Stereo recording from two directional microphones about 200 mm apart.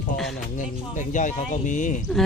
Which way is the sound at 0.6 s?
40° left (ahead or behind).